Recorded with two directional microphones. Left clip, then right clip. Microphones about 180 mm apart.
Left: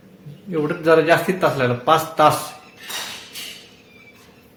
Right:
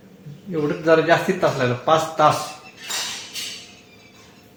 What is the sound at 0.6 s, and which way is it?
A man's voice, 20° left (ahead or behind).